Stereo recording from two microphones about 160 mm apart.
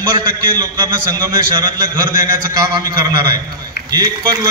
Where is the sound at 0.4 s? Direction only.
25° right (ahead or behind).